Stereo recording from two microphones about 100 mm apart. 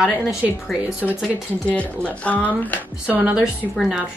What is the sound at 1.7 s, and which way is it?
Speech, 15° left (ahead or behind).